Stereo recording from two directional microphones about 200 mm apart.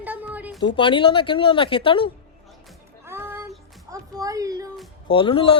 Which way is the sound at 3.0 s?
10° right (ahead or behind).